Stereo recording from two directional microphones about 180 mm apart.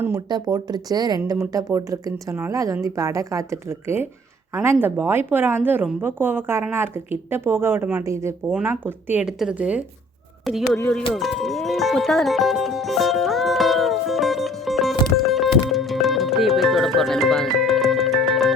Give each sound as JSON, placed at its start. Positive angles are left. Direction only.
{"t": 0.0, "sound": "speech", "side_deg": -20}
{"t": 11.1, "sound": "music", "side_deg": 0}